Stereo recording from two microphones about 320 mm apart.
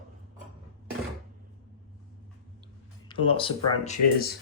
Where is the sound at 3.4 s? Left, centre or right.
Centre.